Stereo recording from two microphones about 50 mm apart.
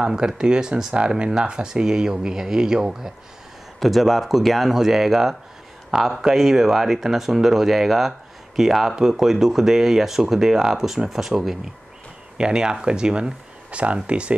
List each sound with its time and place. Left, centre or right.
0.0 s speech: centre
3.8 s speech: centre; by 14.3 s right